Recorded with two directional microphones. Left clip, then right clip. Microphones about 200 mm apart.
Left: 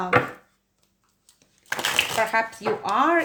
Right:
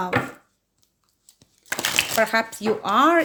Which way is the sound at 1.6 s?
30° right (ahead or behind).